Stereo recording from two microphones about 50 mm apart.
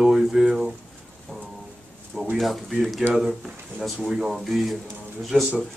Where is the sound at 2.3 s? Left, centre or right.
Centre.